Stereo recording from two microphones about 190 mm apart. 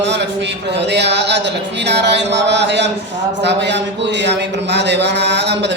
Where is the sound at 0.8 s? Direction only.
65° right (ahead or behind).